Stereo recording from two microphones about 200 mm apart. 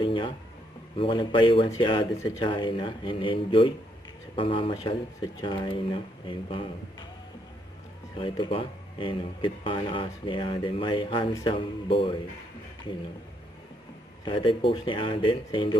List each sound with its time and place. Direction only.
0.0 s a sound: 25° left (ahead or behind)
0.9 s speech: 25° left (ahead or behind)
8.2 s speech: 25° left (ahead or behind)
14.3 s speech: 25° left (ahead or behind)